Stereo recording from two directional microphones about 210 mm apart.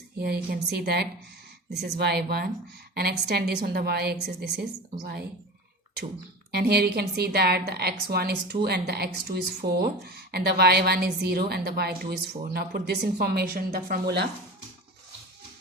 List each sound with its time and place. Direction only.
0.2 s a woman's voice: 45° right (ahead or behind)
6.5 s a woman's voice: 50° right (ahead or behind)